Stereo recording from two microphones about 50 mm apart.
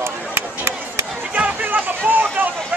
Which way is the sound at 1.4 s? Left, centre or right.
Right.